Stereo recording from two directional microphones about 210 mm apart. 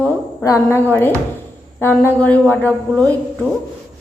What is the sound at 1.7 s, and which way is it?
A woman's voice, 10° left (ahead or behind).